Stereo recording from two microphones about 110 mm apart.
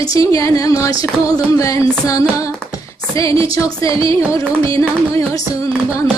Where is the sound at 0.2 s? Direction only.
30° left (ahead or behind).